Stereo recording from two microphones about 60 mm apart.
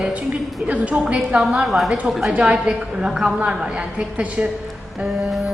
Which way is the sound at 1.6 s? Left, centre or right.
Centre.